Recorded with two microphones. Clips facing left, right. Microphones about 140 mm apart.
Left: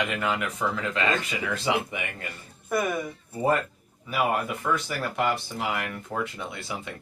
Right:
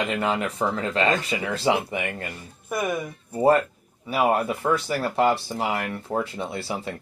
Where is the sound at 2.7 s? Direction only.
15° right (ahead or behind).